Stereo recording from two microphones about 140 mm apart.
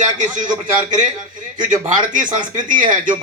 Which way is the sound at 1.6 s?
65° right (ahead or behind).